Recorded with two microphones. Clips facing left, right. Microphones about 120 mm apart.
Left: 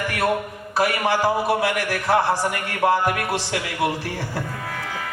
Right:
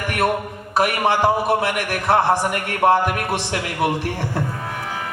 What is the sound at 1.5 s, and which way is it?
Speech, 20° right (ahead or behind).